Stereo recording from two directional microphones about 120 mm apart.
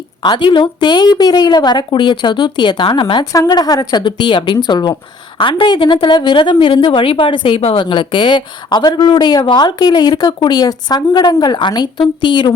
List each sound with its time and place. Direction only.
0.2 s a woman's voice: 40° left (ahead or behind)